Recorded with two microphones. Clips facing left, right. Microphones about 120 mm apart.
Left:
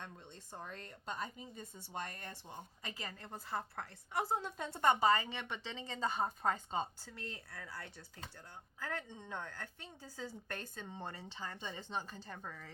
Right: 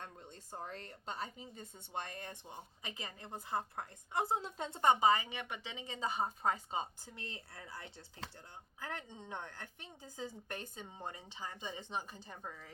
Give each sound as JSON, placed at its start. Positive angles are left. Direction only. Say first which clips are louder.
{"t": 0.0, "sound": "a woman's voice", "louder": "right 1 dB", "side_deg": -40}